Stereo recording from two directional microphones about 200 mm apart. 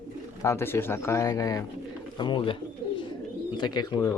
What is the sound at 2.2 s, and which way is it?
Bird, 25° left (ahead or behind).